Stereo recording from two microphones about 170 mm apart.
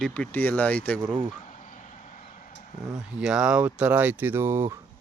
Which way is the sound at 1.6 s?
50° left (ahead or behind).